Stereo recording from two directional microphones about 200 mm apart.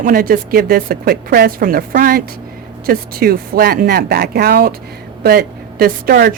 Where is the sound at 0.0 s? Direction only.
45° right (ahead or behind).